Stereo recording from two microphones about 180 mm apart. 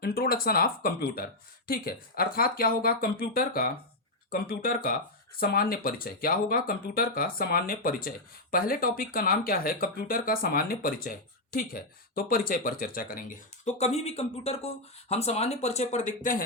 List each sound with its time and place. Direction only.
0.0 s speech: 55° left (ahead or behind)